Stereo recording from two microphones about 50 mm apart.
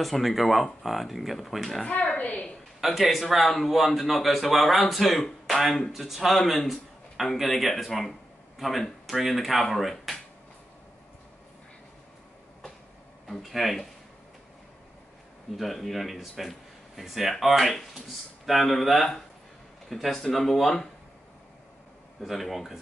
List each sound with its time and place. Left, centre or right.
0.0 s speech: centre
1.9 s a woman's voice: left
2.8 s speech: centre
13.3 s speech: centre
15.5 s speech: centre
22.2 s speech: centre